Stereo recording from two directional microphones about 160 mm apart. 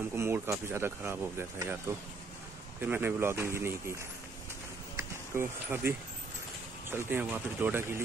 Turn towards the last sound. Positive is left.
turn(degrees=-15)  # may be behind; listen again after turning